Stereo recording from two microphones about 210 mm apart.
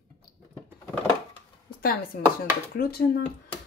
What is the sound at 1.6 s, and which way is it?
Speech, 45° left (ahead or behind).